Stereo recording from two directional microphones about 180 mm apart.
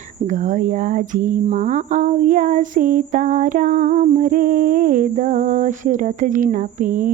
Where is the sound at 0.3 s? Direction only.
45° right (ahead or behind).